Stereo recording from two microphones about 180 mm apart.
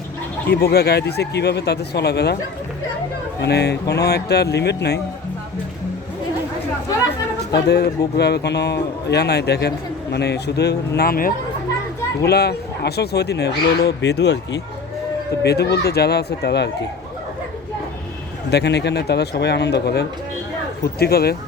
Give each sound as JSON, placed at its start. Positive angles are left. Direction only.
{"t": 0.5, "sound": "speech", "side_deg": 60}
{"t": 3.4, "sound": "speech", "side_deg": 65}
{"t": 7.5, "sound": "speech", "side_deg": 65}
{"t": 18.5, "sound": "speech", "side_deg": 65}